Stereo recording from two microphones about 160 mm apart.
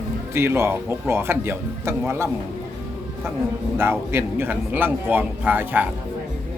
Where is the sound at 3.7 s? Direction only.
15° right (ahead or behind).